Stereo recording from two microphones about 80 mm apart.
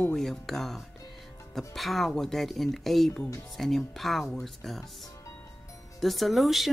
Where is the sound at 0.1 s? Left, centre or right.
Centre.